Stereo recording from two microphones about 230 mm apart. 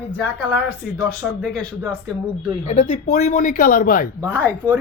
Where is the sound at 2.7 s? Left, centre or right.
Left.